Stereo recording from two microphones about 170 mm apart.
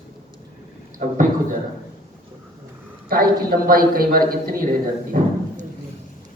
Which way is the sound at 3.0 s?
60° right (ahead or behind).